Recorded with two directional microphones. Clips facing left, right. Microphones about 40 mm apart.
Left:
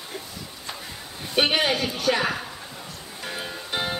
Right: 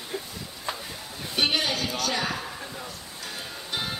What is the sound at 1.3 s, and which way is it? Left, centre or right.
A man's voice, left.